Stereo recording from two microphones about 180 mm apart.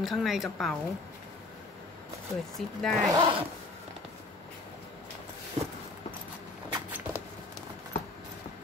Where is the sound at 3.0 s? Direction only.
20° right (ahead or behind).